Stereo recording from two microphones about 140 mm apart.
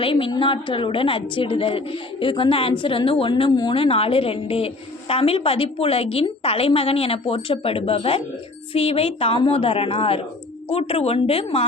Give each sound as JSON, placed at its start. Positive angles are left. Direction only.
{"t": 0.0, "sound": "a woman's voice", "side_deg": 40}